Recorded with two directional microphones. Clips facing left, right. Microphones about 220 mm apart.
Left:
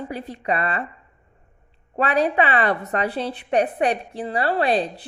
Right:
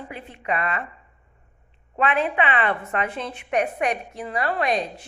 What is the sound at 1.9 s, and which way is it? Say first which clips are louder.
A woman's voice: left 3 dB; 40° left (ahead or behind).